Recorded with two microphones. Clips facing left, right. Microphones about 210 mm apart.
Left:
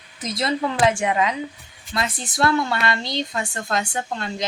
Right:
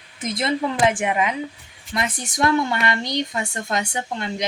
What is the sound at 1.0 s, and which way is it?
A woman's voice, 20° right (ahead or behind).